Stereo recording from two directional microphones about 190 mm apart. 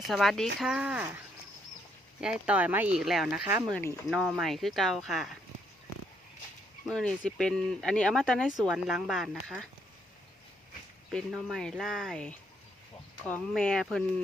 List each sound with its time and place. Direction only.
0.1 s speech: centre (ahead or behind)
2.2 s speech: 5° right (ahead or behind)
6.8 s speech: 5° left (ahead or behind)
11.1 s speech: centre (ahead or behind)